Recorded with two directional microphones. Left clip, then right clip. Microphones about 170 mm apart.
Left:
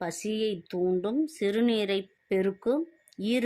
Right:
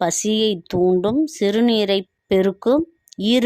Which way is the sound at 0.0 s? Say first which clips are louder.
Right 11 dB; 50° right (ahead or behind).